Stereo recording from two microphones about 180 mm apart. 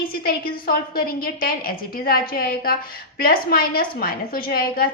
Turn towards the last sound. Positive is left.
turn(degrees=55)  # may be behind; listen again after turning